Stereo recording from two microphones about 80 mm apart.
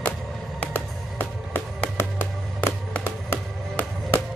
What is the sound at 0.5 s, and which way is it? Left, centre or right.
Music, left.